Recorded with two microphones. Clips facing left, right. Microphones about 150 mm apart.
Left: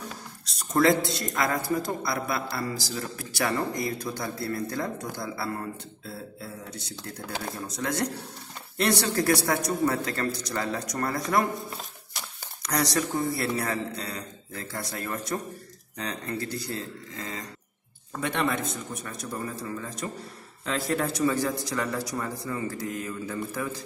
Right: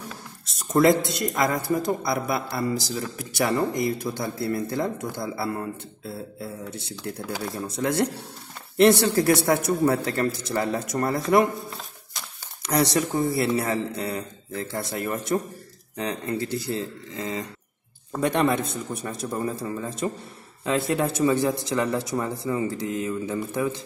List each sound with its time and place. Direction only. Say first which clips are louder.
0.5 s speech: right 3 dB; 20° right (ahead or behind)
13.1 s speech: right 5 dB; 20° right (ahead or behind)
18.2 s speech: right 6 dB; 40° right (ahead or behind); by 23.8 s 20° right (ahead or behind)